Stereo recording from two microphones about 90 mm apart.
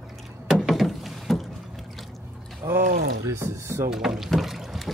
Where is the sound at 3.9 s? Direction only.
5° right (ahead or behind).